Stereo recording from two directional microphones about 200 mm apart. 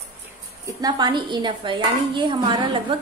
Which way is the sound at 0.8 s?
20° right (ahead or behind).